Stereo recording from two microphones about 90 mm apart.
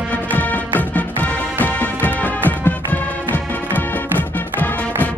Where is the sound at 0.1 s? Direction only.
20° left (ahead or behind).